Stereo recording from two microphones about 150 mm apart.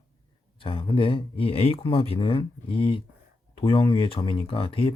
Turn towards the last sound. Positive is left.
turn(degrees=35)  # may be behind; listen again after turning